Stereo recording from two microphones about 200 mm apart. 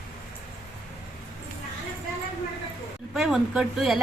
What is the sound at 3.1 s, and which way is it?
Speech, centre (ahead or behind).